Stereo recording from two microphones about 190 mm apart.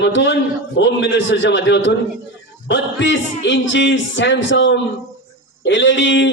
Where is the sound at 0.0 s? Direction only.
75° left (ahead or behind).